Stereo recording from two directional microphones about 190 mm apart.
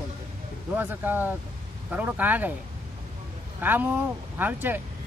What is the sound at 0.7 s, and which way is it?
Speech, 10° right (ahead or behind).